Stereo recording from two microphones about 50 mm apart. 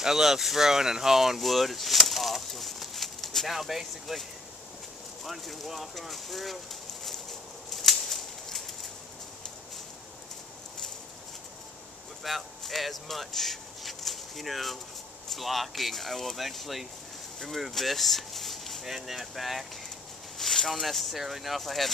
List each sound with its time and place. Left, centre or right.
0.0 s speech: centre
7.7 s a sound: centre
12.2 s speech: centre